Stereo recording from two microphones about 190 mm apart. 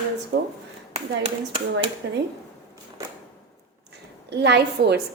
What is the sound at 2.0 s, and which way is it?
Speech, 70° right (ahead or behind).